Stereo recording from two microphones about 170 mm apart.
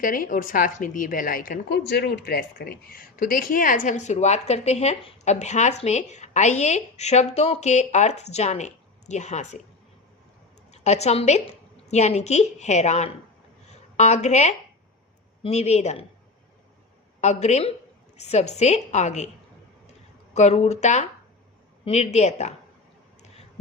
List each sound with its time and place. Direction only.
0.0 s speech: 55° left (ahead or behind)
1.9 s speech: 85° left; by 9.6 s 40° left (ahead or behind)
10.7 s a woman's voice: 40° left (ahead or behind)
17.2 s a woman's voice: 40° left (ahead or behind)
20.3 s a woman's voice: 40° left (ahead or behind)